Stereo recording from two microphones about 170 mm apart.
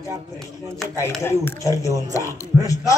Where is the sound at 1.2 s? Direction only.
15° left (ahead or behind).